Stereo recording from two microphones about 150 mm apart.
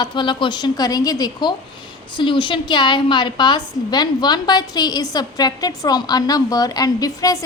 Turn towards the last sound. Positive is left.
turn(degrees=25)  # may be behind; listen again after turning